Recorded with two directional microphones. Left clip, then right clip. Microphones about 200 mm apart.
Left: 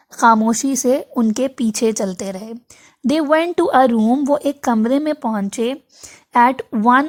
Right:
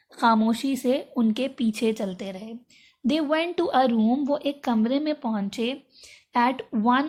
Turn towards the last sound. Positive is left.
turn(degrees=45)  # may be behind; listen again after turning